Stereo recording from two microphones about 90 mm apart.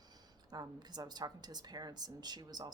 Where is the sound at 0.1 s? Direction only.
50° right (ahead or behind).